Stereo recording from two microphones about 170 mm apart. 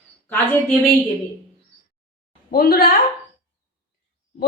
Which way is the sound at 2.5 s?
60° left (ahead or behind).